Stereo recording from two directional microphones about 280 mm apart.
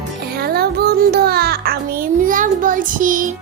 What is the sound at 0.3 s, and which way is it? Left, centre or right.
A child's voice, right.